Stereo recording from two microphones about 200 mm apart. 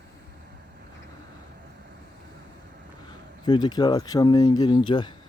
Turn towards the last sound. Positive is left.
turn(degrees=20)  # may be behind; listen again after turning